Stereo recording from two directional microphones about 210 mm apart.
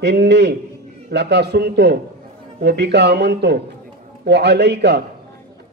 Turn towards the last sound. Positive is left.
turn(degrees=-55)  # may be behind; listen again after turning